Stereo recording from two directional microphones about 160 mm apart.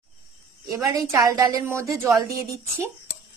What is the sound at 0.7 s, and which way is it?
A woman's voice, 20° right (ahead or behind).